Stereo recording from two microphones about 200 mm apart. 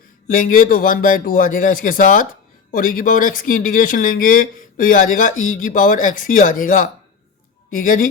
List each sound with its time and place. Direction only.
0.3 s speech: 40° left (ahead or behind)